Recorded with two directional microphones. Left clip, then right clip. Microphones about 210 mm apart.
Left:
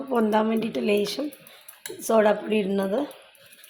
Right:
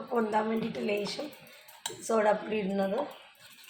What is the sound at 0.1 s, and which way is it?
A woman's voice, 50° left (ahead or behind).